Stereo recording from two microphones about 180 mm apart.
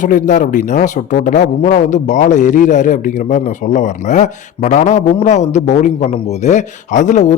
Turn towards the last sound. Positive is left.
turn(degrees=40)  # may be behind; listen again after turning